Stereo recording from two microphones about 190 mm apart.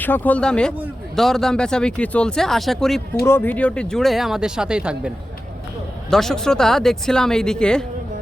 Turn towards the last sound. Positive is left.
turn(degrees=5)  # may be behind; listen again after turning